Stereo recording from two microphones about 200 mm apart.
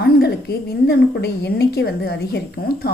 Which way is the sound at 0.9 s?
55° left (ahead or behind).